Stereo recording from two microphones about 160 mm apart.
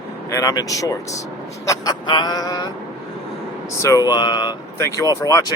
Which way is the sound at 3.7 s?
20° left (ahead or behind).